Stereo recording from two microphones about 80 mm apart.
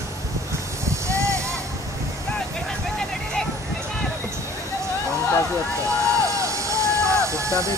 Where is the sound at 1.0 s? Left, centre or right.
Right.